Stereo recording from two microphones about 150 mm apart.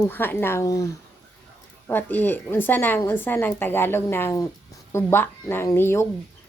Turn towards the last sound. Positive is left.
turn(degrees=15)  # may be behind; listen again after turning